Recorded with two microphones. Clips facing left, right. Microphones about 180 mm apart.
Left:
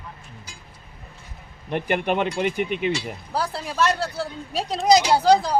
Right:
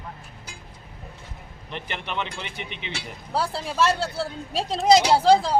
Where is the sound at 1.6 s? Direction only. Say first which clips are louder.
Left 11 dB; 50° left (ahead or behind).